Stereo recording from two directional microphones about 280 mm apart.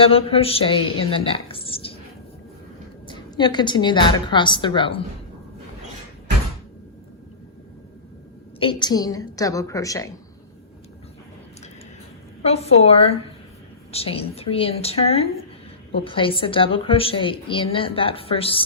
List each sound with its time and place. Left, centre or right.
0.0 s a woman's voice: centre
3.1 s a woman's voice: centre
8.5 s a woman's voice: centre
12.5 s a woman's voice: left